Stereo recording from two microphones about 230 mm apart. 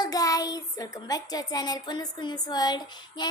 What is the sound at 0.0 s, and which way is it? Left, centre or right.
Speech, centre.